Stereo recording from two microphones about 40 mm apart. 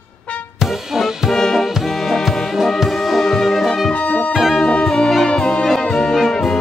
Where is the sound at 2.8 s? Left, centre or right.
Centre.